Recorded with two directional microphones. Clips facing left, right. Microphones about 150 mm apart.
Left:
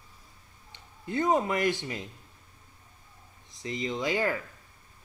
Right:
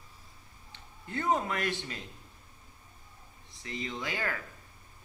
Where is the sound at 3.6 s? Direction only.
20° left (ahead or behind).